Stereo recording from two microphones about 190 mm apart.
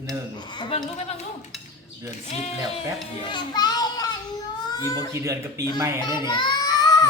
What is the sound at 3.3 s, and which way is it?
A child's voice, 25° left (ahead or behind).